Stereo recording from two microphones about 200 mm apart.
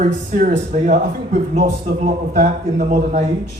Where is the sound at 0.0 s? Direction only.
40° right (ahead or behind).